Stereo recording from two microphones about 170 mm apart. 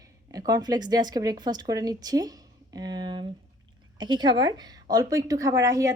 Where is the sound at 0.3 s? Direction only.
20° right (ahead or behind).